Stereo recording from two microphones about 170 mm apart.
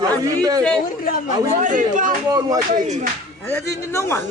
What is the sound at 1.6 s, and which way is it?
Speech, 50° right (ahead or behind).